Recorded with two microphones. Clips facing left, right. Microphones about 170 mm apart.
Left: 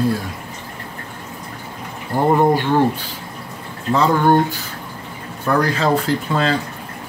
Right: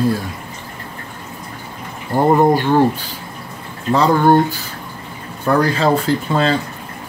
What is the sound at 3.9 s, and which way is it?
Speech, 35° right (ahead or behind).